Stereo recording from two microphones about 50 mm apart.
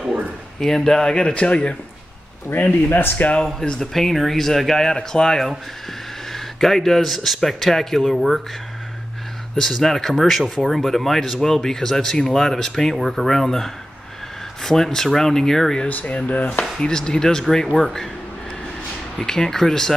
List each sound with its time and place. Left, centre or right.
0.6 s speech: centre
2.5 s speech: left
3.6 s speech: centre
3.9 s speech: centre
9.6 s speech: centre
15.9 s speech: left
16.8 s speech: centre
19.1 s speech: centre